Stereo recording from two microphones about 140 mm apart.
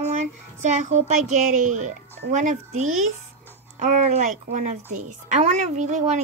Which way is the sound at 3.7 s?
60° right (ahead or behind).